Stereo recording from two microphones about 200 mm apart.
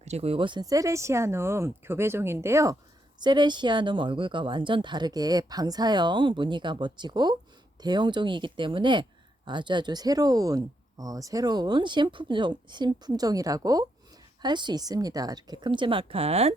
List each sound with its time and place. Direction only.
0.0 s speech: 30° right (ahead or behind)